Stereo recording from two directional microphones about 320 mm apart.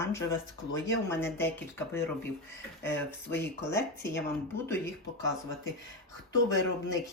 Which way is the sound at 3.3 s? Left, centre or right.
Left.